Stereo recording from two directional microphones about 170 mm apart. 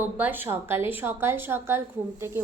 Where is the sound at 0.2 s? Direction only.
10° right (ahead or behind).